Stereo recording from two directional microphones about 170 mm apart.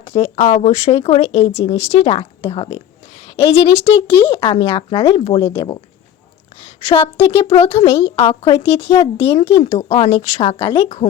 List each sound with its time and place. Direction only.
0.0 s speech: 40° left (ahead or behind)
6.8 s speech: 35° left (ahead or behind)